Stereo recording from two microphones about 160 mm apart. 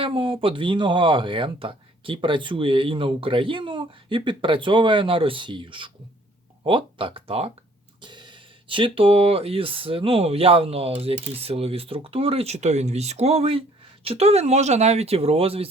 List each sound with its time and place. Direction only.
0.0 s speech: 35° right (ahead or behind)